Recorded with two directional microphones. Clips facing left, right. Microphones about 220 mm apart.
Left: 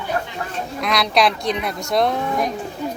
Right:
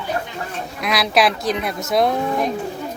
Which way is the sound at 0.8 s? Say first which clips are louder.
Right 1 dB; 5° right (ahead or behind).